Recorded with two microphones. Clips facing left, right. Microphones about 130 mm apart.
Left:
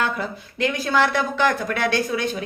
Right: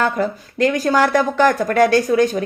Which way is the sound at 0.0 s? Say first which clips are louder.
Right 6 dB; 45° right (ahead or behind).